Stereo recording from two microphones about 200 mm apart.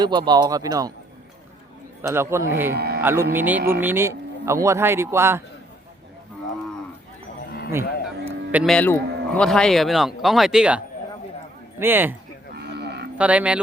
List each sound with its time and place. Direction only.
0.0 s speech: 20° right (ahead or behind)
2.0 s speech: 10° right (ahead or behind)
2.7 s speech: 50° right (ahead or behind)
3.0 s speech: 10° right (ahead or behind)
7.7 s music: 10° right (ahead or behind)
8.6 s speech: 5° left (ahead or behind); by 12.1 s 10° right (ahead or behind)
12.5 s a sound: 55° right (ahead or behind)
13.1 s speech: 5° right (ahead or behind)